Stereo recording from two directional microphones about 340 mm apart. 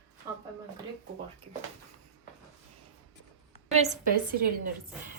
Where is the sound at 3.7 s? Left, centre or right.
Centre.